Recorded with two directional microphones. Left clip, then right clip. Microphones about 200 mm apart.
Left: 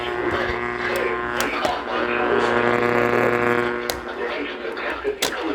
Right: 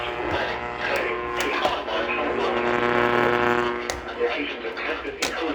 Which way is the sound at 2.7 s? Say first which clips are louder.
Left 2 dB; 15° left (ahead or behind).